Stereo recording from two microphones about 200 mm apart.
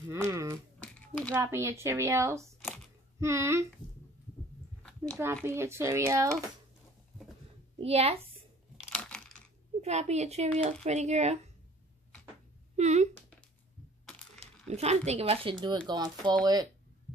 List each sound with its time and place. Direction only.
0.3 s a sound: 15° right (ahead or behind)
0.7 s a sound: 5° left (ahead or behind)
1.3 s speech: 15° right (ahead or behind)
5.1 s speech: 10° right (ahead or behind)
7.8 s speech: 30° right (ahead or behind)
8.7 s a sound: 5° left (ahead or behind)
9.8 s a woman's voice: 35° right (ahead or behind)
12.7 s speech: 35° right (ahead or behind)
14.7 s speech: 30° right (ahead or behind)